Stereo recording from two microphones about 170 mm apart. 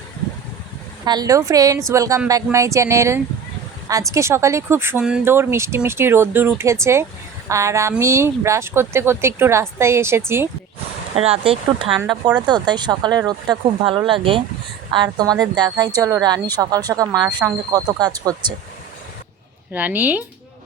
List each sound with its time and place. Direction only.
1.0 s a woman's voice: 25° right (ahead or behind)
11.1 s a woman's voice: 35° right (ahead or behind)
19.7 s speech: 10° right (ahead or behind)